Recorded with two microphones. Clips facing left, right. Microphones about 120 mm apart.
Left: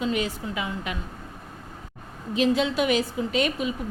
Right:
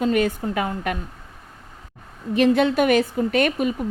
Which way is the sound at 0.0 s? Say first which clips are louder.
Right 6 dB; 50° right (ahead or behind).